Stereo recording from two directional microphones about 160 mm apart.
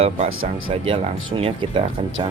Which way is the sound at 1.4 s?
30° right (ahead or behind).